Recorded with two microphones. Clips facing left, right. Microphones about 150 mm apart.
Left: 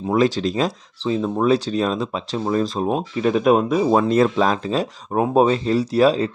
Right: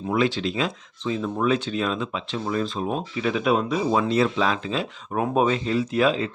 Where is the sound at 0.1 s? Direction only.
40° left (ahead or behind).